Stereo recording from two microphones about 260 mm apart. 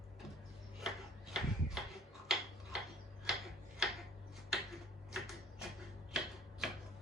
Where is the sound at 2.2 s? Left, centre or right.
Centre.